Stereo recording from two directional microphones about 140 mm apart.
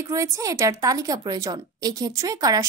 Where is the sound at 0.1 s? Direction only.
25° right (ahead or behind).